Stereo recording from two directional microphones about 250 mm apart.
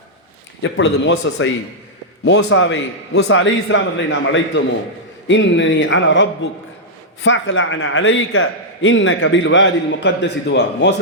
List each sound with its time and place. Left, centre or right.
0.6 s a man's voice: left